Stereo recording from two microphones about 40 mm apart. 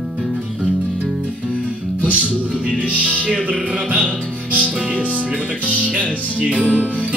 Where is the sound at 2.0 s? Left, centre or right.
Right.